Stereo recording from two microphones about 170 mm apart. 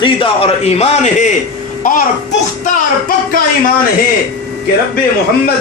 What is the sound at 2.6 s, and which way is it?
Speech, 55° left (ahead or behind).